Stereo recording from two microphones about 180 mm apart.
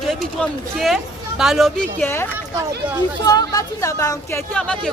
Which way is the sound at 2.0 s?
15° left (ahead or behind).